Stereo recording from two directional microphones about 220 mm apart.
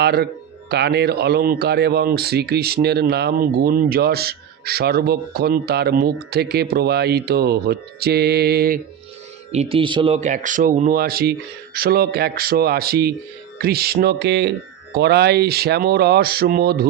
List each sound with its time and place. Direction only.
0.0 s speech: 50° right (ahead or behind)
9.5 s speech: 30° right (ahead or behind); by 16.8 s 45° right (ahead or behind)